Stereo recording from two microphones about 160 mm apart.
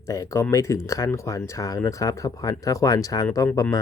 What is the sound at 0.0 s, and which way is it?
Speech, 20° left (ahead or behind).